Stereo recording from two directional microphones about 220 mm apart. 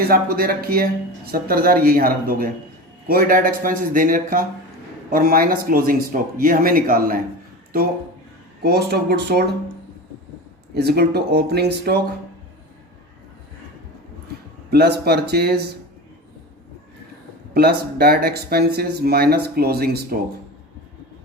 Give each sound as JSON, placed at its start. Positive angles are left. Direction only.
{"t": 0.0, "sound": "speech", "side_deg": -45}
{"t": 8.6, "sound": "speech", "side_deg": -45}
{"t": 10.8, "sound": "speech", "side_deg": -45}
{"t": 14.7, "sound": "speech", "side_deg": -45}
{"t": 17.5, "sound": "speech", "side_deg": -45}